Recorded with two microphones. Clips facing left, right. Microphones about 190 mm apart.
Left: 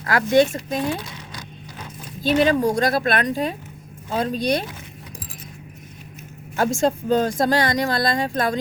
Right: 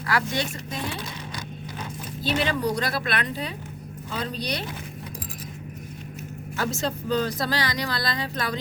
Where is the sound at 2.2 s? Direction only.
45° left (ahead or behind).